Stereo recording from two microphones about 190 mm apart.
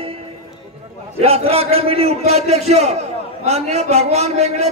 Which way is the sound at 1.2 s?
30° right (ahead or behind).